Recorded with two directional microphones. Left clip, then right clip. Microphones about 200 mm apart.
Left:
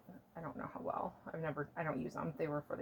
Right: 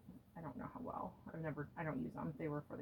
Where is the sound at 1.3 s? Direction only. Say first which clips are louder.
Left 5 dB; 35° left (ahead or behind).